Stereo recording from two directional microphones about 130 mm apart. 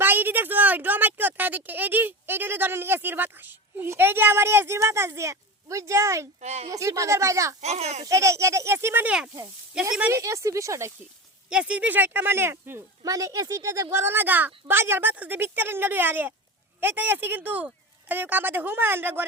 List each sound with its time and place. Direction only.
0.0 s speech: 15° right (ahead or behind)
6.4 s a child's voice: 55° right (ahead or behind)
6.7 s speech: 25° right (ahead or behind)
7.6 s a child's voice: 55° right (ahead or behind)
8.0 s speech: 20° right (ahead or behind)
9.7 s a woman's voice: 5° right (ahead or behind)
10.1 s speech: 25° right (ahead or behind)
11.4 s a woman's voice: 10° right (ahead or behind)